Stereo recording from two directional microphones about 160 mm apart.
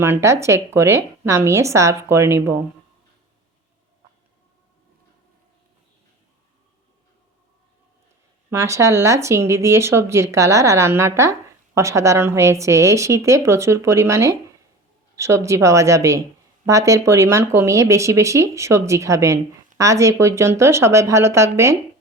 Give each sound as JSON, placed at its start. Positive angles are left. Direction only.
{"t": 0.0, "sound": "speech", "side_deg": -15}
{"t": 8.4, "sound": "speech", "side_deg": -15}